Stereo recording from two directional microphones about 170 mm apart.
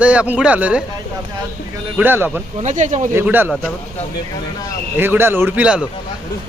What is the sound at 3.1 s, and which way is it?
Speech, 10° right (ahead or behind).